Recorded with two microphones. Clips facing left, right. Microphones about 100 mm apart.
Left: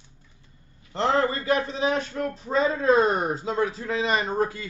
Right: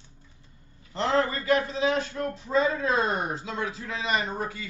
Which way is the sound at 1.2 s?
30° left (ahead or behind).